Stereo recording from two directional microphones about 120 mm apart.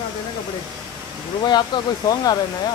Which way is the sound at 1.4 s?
40° left (ahead or behind).